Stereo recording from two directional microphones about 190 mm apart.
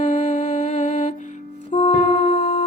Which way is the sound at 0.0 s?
40° left (ahead or behind).